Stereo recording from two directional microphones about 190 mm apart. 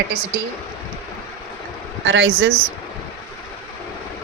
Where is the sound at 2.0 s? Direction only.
75° right (ahead or behind).